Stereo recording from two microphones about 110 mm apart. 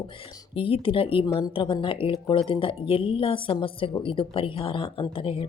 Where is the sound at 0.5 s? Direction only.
55° left (ahead or behind).